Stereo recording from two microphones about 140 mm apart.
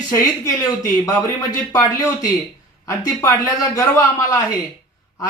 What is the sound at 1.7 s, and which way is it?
A man's voice, 25° left (ahead or behind).